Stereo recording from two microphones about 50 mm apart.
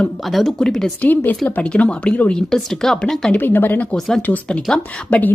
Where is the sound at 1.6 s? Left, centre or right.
Left.